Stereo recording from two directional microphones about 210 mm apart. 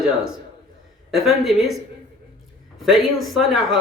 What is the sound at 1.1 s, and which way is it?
Speech, centre (ahead or behind).